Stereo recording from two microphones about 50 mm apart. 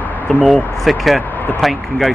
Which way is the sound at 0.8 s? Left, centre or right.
Centre.